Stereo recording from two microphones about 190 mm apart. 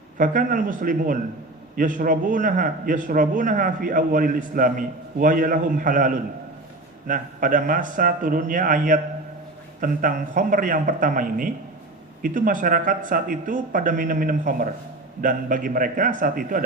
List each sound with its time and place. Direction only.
0.2 s a man's voice: 45° right (ahead or behind)